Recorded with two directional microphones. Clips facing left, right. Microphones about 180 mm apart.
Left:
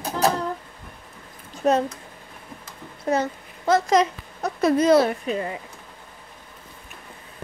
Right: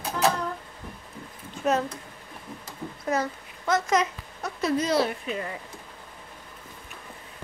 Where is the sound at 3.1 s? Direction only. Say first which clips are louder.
Left 4 dB; 30° left (ahead or behind).